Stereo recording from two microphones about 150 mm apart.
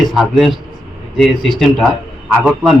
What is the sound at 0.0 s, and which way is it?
A man's voice, centre (ahead or behind).